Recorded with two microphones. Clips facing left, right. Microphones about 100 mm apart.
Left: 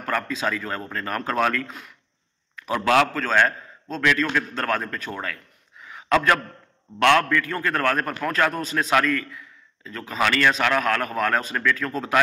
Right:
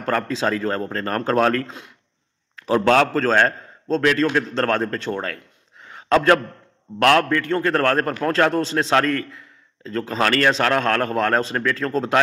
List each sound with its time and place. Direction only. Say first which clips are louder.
0.0 s speech: right 4 dB; 35° right (ahead or behind)
2.6 s speech: right 3 dB; 30° right (ahead or behind)
5.8 s a sound: right 3 dB; 30° right (ahead or behind)
7.0 s speech: right 2 dB; 30° right (ahead or behind)